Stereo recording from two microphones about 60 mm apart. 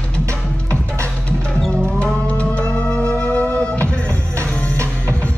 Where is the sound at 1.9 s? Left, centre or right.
Centre.